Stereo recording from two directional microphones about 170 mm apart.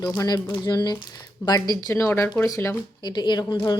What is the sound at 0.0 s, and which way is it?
Speech, 20° left (ahead or behind).